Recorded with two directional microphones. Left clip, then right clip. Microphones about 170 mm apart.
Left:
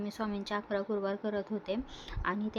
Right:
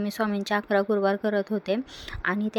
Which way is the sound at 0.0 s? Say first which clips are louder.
Right 9 dB; 40° right (ahead or behind).